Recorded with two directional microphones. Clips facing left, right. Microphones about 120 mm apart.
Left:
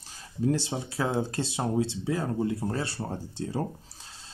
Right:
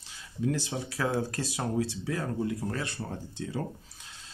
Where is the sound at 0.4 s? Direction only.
30° left (ahead or behind).